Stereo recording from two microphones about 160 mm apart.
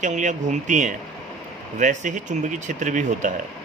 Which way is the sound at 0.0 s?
50° right (ahead or behind).